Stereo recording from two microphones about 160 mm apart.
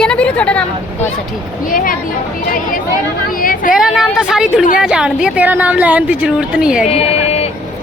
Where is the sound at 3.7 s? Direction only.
5° right (ahead or behind).